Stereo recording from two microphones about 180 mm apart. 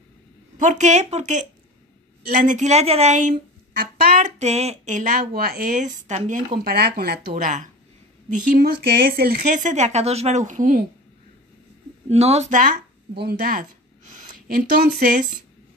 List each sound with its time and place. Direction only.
0.6 s speech: 45° right (ahead or behind)
5.3 s speech: 55° right (ahead or behind)
12.1 s speech: 35° right (ahead or behind); by 15.3 s 50° right (ahead or behind)